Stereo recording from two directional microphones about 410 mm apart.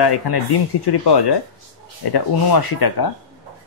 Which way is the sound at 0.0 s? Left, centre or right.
Left.